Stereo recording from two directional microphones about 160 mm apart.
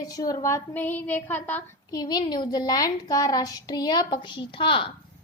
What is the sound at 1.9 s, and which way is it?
A woman's voice, 25° left (ahead or behind).